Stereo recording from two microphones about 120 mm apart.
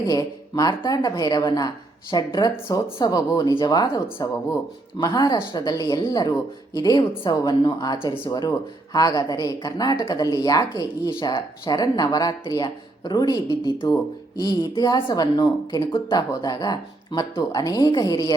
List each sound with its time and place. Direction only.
0.0 s a woman's voice: 30° left (ahead or behind)